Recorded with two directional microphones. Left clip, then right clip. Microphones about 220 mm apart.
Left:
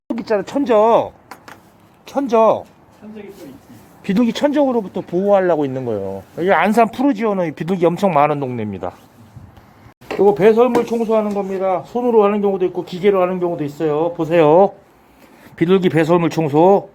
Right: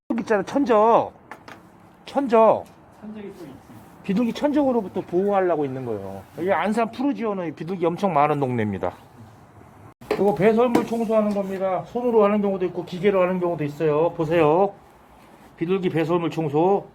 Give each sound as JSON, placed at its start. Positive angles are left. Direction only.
{"t": 0.1, "sound": "speech", "side_deg": 5}
{"t": 4.0, "sound": "speech", "side_deg": 35}
{"t": 5.2, "sound": "speech", "side_deg": 25}
{"t": 8.4, "sound": "speech", "side_deg": 0}
{"t": 10.2, "sound": "speech", "side_deg": 30}
{"t": 11.3, "sound": "speech", "side_deg": 40}
{"t": 11.9, "sound": "speech", "side_deg": 30}
{"t": 15.5, "sound": "speech", "side_deg": 35}